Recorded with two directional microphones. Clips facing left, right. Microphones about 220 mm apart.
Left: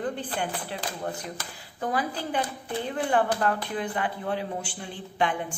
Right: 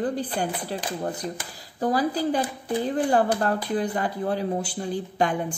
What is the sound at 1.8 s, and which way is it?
A woman's voice, 35° right (ahead or behind).